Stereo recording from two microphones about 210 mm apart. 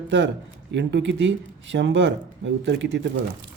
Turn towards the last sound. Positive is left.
turn(degrees=-55)  # may be behind; listen again after turning